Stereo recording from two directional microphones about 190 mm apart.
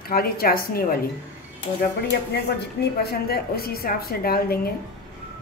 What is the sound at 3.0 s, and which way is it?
A woman's voice, 55° left (ahead or behind).